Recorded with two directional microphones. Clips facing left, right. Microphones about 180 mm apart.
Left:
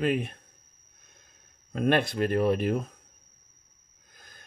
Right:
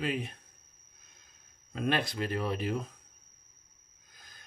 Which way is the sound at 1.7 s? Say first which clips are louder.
Left 6 dB; 50° left (ahead or behind).